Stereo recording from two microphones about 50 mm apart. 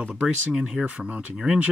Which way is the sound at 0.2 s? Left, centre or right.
Centre.